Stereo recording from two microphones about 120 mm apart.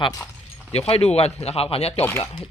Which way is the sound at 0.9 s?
55° left (ahead or behind).